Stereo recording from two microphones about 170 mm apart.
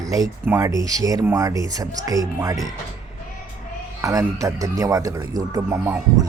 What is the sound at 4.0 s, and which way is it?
A man's voice, 20° right (ahead or behind).